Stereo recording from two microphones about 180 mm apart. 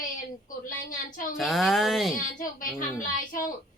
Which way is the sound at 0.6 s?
50° left (ahead or behind).